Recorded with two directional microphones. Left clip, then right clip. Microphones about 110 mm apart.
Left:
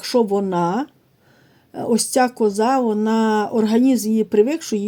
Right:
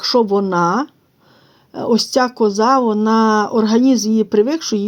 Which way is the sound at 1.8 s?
65° right (ahead or behind).